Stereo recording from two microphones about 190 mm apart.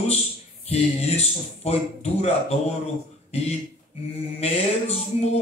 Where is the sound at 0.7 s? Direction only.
35° left (ahead or behind).